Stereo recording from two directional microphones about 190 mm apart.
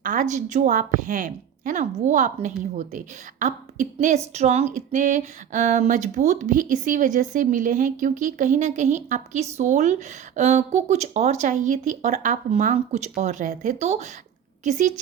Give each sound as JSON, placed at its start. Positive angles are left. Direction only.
{"t": 0.0, "sound": "a woman's voice", "side_deg": -45}